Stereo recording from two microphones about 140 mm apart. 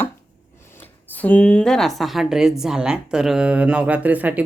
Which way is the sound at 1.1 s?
10° left (ahead or behind).